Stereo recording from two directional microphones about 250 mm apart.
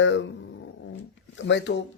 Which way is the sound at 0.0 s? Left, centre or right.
Left.